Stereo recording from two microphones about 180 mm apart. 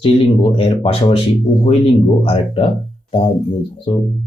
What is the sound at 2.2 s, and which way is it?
Speech, 30° left (ahead or behind).